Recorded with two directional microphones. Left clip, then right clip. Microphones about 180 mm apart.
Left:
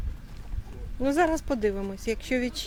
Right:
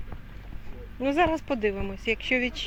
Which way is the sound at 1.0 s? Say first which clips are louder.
Even; 30° left (ahead or behind).